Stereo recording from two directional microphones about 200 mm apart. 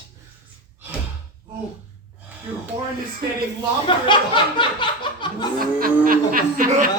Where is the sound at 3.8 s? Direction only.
25° left (ahead or behind).